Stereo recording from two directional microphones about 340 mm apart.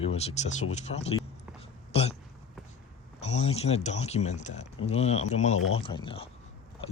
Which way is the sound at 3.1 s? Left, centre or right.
Centre.